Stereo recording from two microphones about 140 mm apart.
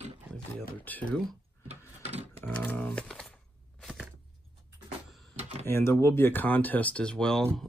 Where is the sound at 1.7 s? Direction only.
50° right (ahead or behind).